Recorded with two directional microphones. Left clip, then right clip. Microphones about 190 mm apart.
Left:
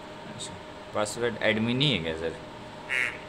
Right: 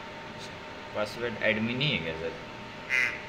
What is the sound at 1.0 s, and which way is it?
Speech, 35° left (ahead or behind).